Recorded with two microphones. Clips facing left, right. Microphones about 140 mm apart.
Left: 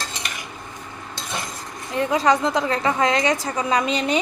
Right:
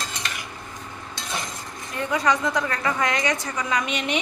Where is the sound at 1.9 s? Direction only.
25° left (ahead or behind).